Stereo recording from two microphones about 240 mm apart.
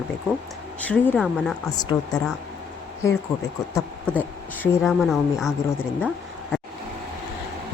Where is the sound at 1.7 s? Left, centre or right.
Centre.